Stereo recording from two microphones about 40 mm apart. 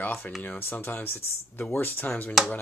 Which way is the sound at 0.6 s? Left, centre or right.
Left.